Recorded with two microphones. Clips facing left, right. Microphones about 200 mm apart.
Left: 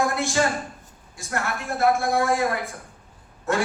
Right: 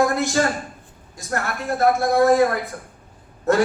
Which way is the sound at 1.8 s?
40° right (ahead or behind).